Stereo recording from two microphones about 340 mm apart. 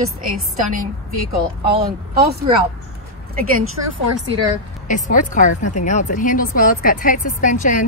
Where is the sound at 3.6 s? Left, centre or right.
Right.